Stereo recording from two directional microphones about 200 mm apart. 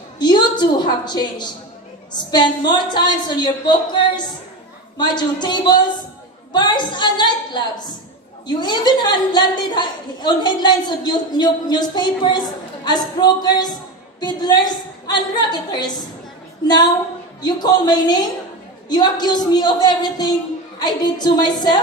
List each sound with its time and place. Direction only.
0.2 s a woman's voice: 20° left (ahead or behind)
17.4 s a woman's voice: 20° left (ahead or behind)